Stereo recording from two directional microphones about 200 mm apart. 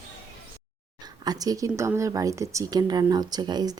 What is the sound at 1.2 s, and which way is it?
Speech, 20° right (ahead or behind).